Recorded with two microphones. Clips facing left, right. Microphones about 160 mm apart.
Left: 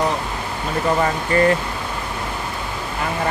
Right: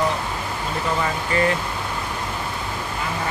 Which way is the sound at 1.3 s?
50° left (ahead or behind).